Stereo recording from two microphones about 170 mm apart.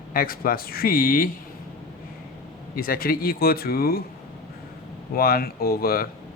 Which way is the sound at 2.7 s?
60° left (ahead or behind).